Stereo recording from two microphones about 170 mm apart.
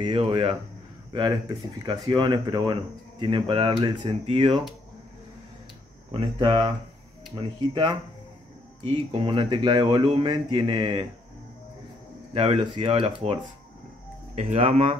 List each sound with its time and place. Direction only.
0.0 s speech: 30° right (ahead or behind)
1.8 s speech: 25° right (ahead or behind)
6.1 s speech: 30° right (ahead or behind)
12.4 s speech: 30° right (ahead or behind)